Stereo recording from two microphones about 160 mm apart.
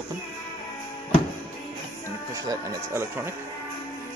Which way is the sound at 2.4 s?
15° right (ahead or behind).